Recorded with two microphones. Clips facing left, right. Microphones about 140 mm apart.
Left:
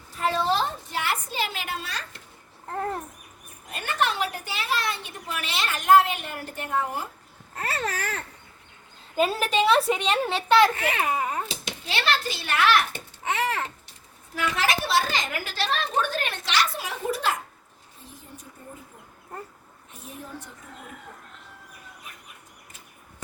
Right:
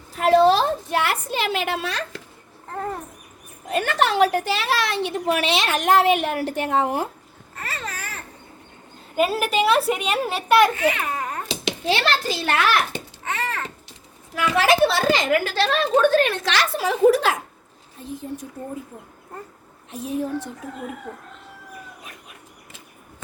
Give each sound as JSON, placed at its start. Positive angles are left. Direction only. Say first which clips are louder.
{"t": 0.2, "sound": "a sound", "louder": "right 9 dB", "side_deg": -80}
{"t": 3.7, "sound": "a woman's voice", "louder": "right 6 dB", "side_deg": -90}
{"t": 7.9, "sound": "speech", "louder": "left 4 dB", "side_deg": 90}
{"t": 9.1, "sound": "a woman's voice", "louder": "right 3 dB", "side_deg": -5}
{"t": 11.1, "sound": "a sound", "louder": "left 1 dB", "side_deg": 5}
{"t": 11.4, "sound": "a child's voice", "louder": "right 11 dB", "side_deg": -90}
{"t": 13.2, "sound": "a sound", "louder": "left 2 dB", "side_deg": 10}
{"t": 14.4, "sound": "a woman's voice", "louder": "right 9 dB", "side_deg": -80}
{"t": 19.9, "sound": "a woman's voice", "louder": "right 14 dB", "side_deg": -90}